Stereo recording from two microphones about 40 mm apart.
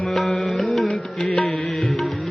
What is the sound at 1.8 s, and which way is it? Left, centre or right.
Music, centre.